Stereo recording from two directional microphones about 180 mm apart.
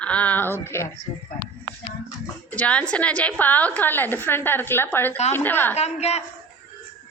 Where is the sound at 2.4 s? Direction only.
10° left (ahead or behind).